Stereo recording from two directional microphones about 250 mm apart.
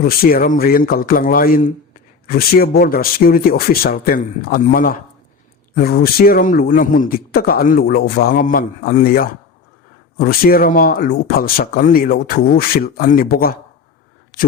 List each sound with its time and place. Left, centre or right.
0.0 s speech: left